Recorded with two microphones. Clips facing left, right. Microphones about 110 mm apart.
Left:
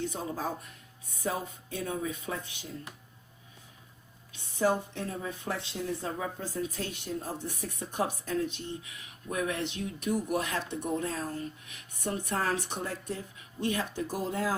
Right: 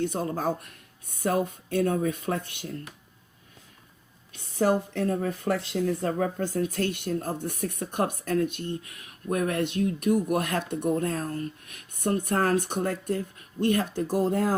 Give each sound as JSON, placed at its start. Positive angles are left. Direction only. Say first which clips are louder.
{"t": 0.0, "sound": "speech", "louder": "right 6 dB", "side_deg": -60}
{"t": 4.3, "sound": "speech", "louder": "right 4 dB", "side_deg": -60}